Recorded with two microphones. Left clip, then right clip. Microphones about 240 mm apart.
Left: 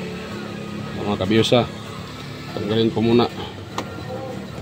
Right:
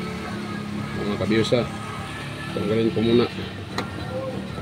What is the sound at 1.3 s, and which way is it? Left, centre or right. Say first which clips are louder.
Speech: left 4 dB; left.